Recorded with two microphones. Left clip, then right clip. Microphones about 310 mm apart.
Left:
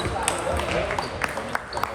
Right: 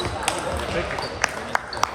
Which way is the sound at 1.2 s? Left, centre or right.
Right.